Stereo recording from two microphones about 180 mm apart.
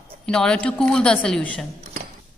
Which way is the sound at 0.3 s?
5° left (ahead or behind).